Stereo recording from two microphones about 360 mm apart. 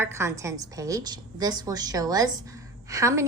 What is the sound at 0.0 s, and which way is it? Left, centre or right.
A woman's voice, centre.